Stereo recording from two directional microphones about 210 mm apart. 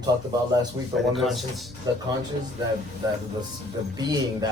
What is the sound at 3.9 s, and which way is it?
Speech, 20° right (ahead or behind).